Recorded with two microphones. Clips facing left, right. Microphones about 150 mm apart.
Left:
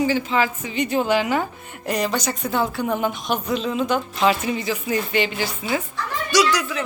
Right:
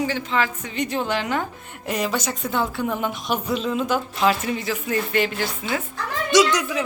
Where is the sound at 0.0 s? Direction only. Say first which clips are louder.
Left 3 dB; 5° left (ahead or behind).